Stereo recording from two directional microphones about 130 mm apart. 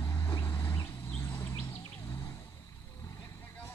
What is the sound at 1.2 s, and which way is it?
Bird, 20° left (ahead or behind).